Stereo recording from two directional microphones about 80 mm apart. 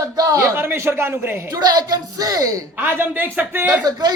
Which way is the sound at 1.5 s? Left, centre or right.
Right.